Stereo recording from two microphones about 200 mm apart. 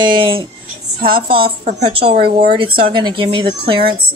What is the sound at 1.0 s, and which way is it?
Speech, 45° right (ahead or behind).